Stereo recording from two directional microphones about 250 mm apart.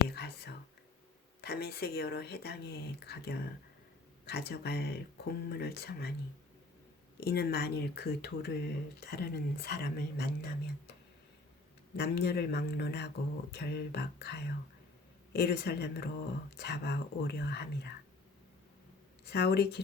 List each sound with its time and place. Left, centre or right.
0.1 s whispering: left
1.4 s speech: left
7.2 s speech: left
11.9 s speech: left
19.2 s speech: left